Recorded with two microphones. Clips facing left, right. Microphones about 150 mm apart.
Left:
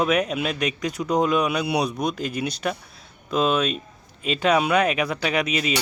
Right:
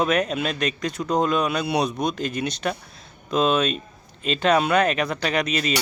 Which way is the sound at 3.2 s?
5° left (ahead or behind).